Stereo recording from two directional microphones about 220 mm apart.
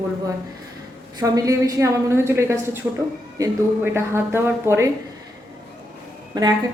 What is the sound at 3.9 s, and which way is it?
Speech, 10° right (ahead or behind).